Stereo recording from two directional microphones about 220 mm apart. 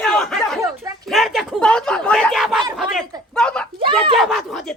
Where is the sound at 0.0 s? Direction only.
5° left (ahead or behind).